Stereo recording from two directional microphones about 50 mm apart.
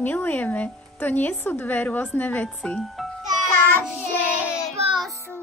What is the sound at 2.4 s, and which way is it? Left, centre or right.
Speech, centre.